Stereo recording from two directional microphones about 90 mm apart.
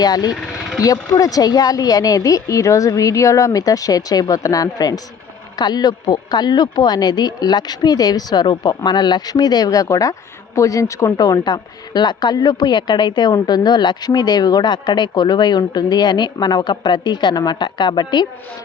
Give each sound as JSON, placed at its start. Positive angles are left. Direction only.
{"t": 0.0, "sound": "a woman's voice", "side_deg": 45}
{"t": 13.3, "sound": "speech", "side_deg": 45}